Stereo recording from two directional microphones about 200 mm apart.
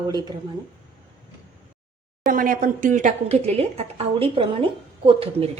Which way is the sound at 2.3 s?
45° right (ahead or behind).